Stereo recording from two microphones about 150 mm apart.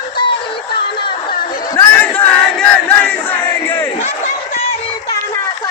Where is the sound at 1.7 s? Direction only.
10° left (ahead or behind).